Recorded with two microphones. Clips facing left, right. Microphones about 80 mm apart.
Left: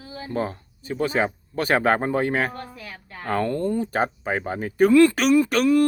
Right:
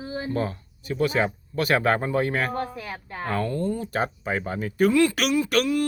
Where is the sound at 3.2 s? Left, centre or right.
Left.